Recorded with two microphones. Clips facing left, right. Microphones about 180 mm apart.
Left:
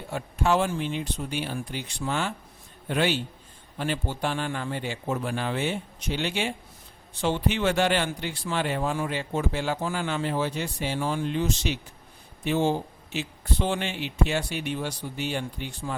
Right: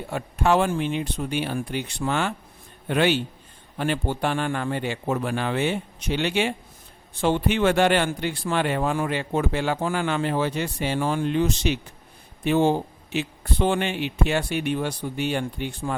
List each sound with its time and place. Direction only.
0.1 s speech: 60° right (ahead or behind)
7.1 s speech: 55° right (ahead or behind)